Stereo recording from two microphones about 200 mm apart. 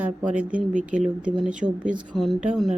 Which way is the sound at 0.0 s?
5° right (ahead or behind).